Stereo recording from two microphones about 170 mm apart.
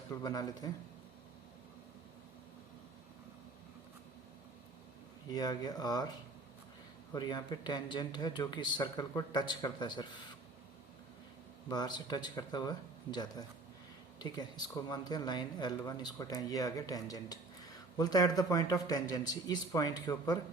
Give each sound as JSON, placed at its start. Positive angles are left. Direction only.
{"t": 0.1, "sound": "speech", "side_deg": 25}
{"t": 5.3, "sound": "speech", "side_deg": 25}
{"t": 7.1, "sound": "speech", "side_deg": 25}
{"t": 11.7, "sound": "speech", "side_deg": 25}